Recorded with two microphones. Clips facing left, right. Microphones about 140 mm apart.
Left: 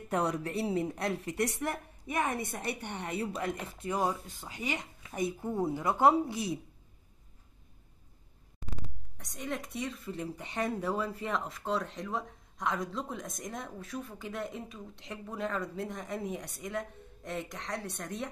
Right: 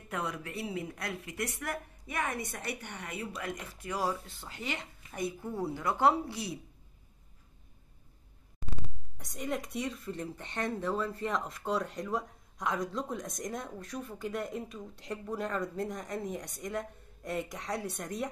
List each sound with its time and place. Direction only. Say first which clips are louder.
0.1 s a woman's voice: left 6 dB; 35° left (ahead or behind); by 2.4 s 20° left (ahead or behind)
2.8 s speech: left 5 dB; 30° left (ahead or behind)
9.2 s speech: right 2 dB; centre (ahead or behind)